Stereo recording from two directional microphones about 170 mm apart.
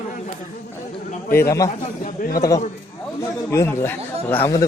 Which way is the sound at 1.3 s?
15° left (ahead or behind).